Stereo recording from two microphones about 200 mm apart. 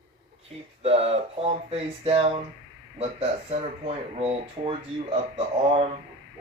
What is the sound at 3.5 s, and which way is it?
Speech, 30° right (ahead or behind).